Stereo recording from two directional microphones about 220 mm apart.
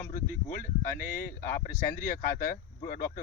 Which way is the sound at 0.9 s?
40° left (ahead or behind).